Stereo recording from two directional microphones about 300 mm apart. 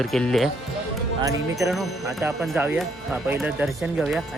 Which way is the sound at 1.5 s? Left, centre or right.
Centre.